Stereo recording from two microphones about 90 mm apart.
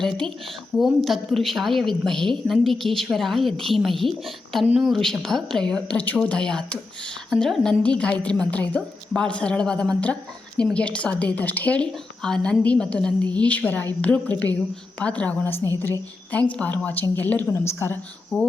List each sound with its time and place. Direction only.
0.8 s a woman's voice: centre (ahead or behind); by 18.0 s 30° left (ahead or behind)
18.3 s a woman's voice: 15° left (ahead or behind)